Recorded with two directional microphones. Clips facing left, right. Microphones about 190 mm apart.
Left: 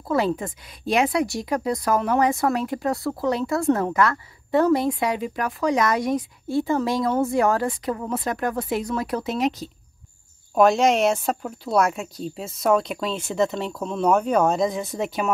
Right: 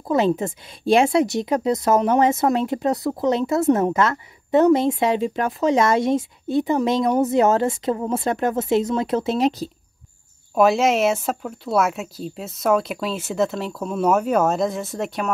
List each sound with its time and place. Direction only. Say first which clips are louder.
0.1 s a woman's voice: right 3 dB; 20° right (ahead or behind)
10.5 s speech: even; 5° right (ahead or behind)